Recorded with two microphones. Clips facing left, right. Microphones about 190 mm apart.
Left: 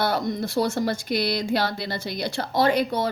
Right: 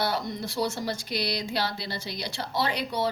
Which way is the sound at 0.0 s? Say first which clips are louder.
Left 5 dB; 50° left (ahead or behind).